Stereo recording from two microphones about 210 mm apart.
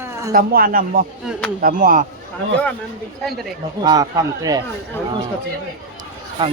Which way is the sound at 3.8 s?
20° right (ahead or behind).